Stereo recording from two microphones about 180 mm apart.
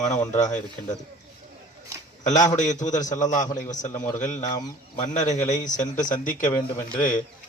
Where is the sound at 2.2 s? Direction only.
40° left (ahead or behind).